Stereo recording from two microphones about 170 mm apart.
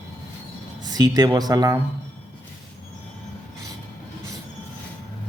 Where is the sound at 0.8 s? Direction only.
25° right (ahead or behind).